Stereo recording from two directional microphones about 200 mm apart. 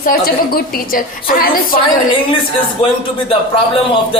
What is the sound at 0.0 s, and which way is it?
Speech, 50° left (ahead or behind).